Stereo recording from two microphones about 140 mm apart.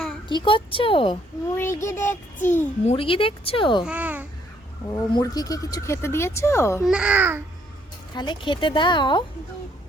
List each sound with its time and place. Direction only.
0.3 s speech: 35° left (ahead or behind)
1.5 s child singing: 20° left (ahead or behind)
2.8 s speech: 40° left (ahead or behind)
3.8 s a child's voice: 10° right (ahead or behind)
4.9 s speech: 25° left (ahead or behind)
6.8 s a child's voice: 5° right (ahead or behind)
8.1 s speech: 30° left (ahead or behind)